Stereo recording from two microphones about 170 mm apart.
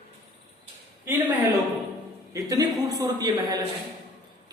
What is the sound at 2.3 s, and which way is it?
A woman's voice, 20° right (ahead or behind).